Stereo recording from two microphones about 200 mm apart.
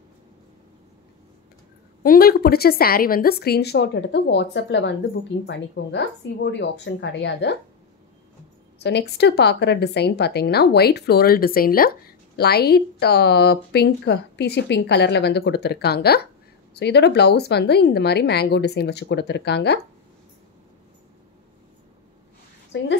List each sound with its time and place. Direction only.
2.0 s a woman's voice: 50° left (ahead or behind)
8.7 s a woman's voice: 55° left (ahead or behind)